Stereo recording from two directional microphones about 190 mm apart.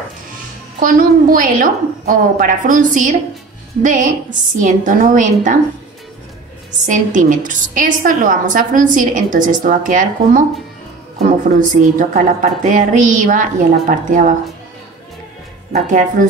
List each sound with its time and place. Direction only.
0.7 s a woman's voice: 45° right (ahead or behind)
6.9 s a woman's voice: 40° right (ahead or behind)
11.7 s a woman's voice: 45° right (ahead or behind)
15.7 s speech: 40° right (ahead or behind)